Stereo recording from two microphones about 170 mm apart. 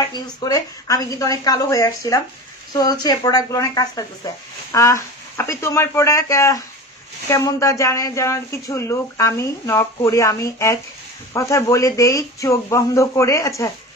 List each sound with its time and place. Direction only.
0.1 s a woman's voice: 20° left (ahead or behind)